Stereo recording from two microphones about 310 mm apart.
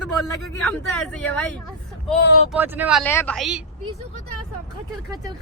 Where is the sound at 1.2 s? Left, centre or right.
Centre.